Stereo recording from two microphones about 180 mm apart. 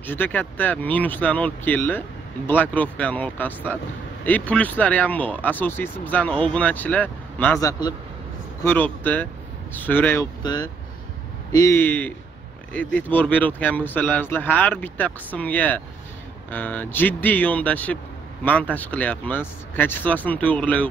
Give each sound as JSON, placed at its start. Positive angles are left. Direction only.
{"t": 0.0, "sound": "speech", "side_deg": 10}
{"t": 10.4, "sound": "speech", "side_deg": 20}